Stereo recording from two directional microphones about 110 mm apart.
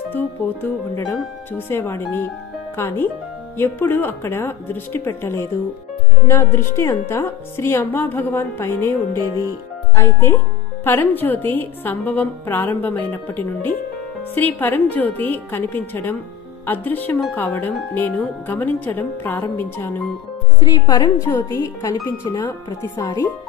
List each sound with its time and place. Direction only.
0.1 s a woman's voice: 15° left (ahead or behind)
9.9 s a woman's voice: 20° left (ahead or behind)
20.5 s speech: 35° left (ahead or behind)
21.3 s a woman's voice: 20° left (ahead or behind)